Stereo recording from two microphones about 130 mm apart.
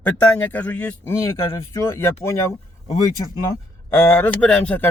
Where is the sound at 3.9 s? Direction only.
15° left (ahead or behind).